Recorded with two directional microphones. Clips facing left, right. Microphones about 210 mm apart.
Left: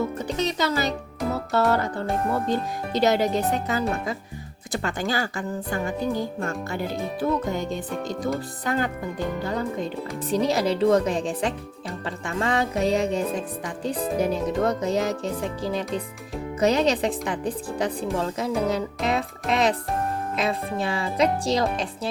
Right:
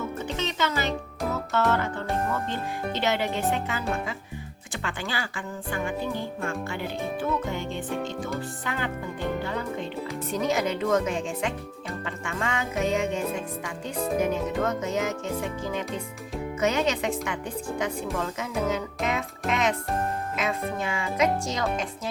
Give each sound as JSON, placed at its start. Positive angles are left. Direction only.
{"t": 0.0, "sound": "music", "side_deg": 40}
{"t": 2.3, "sound": "speech", "side_deg": 40}